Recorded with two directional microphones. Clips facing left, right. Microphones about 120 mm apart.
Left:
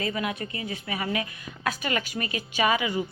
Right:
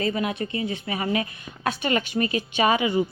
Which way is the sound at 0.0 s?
30° right (ahead or behind).